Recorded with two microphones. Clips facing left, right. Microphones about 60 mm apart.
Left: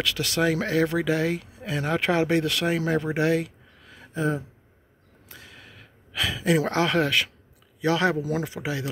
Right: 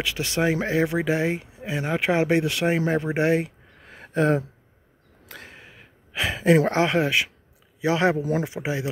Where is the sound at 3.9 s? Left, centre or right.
Right.